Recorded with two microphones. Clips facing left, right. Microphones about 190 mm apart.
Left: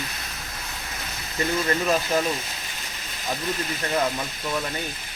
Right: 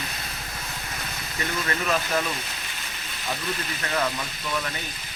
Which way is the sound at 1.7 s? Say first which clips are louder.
Left 1 dB; 30° left (ahead or behind).